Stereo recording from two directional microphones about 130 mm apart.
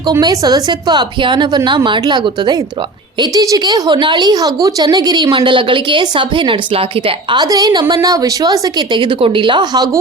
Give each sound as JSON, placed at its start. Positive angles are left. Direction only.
{"t": 0.1, "sound": "a woman's voice", "side_deg": -30}